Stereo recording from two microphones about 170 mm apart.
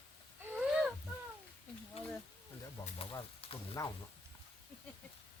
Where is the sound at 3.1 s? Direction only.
35° left (ahead or behind).